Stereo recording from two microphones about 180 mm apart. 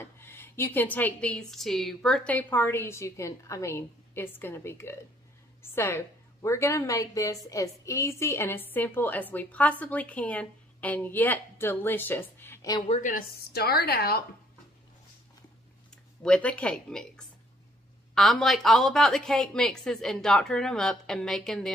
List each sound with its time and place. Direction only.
0.0 s a woman's voice: 10° left (ahead or behind)
12.8 s a woman's voice: 35° left (ahead or behind)
13.1 s a woman's voice: 60° left (ahead or behind)
16.2 s a woman's voice: 5° left (ahead or behind)
18.1 s a woman's voice: centre (ahead or behind)